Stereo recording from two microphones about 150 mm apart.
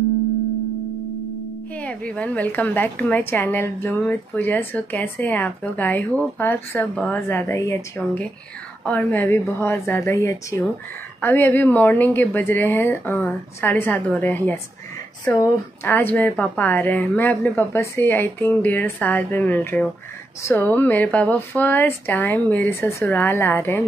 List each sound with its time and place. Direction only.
1.8 s a woman's voice: 10° left (ahead or behind)
15.8 s a woman's voice: 15° left (ahead or behind)